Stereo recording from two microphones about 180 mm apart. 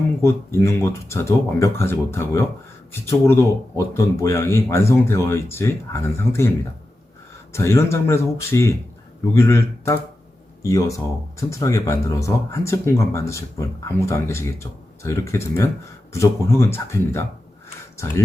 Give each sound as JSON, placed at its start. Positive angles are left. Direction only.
{"t": 0.2, "sound": "speech", "side_deg": 15}
{"t": 7.5, "sound": "speech", "side_deg": 15}